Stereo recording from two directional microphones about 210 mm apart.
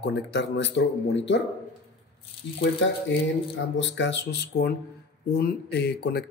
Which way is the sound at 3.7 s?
60° left (ahead or behind).